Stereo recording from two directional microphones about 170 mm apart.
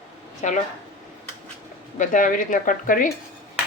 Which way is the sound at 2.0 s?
50° left (ahead or behind).